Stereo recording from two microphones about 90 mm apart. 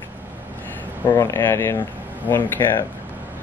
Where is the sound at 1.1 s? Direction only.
30° left (ahead or behind).